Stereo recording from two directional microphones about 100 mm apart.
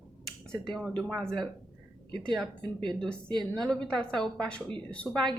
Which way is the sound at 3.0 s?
10° left (ahead or behind).